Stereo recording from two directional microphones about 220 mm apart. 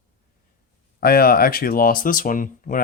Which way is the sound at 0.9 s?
45° left (ahead or behind).